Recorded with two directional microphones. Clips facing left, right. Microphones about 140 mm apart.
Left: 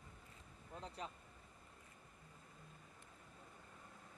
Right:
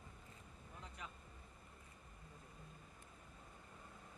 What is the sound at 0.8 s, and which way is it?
Speech, 30° left (ahead or behind).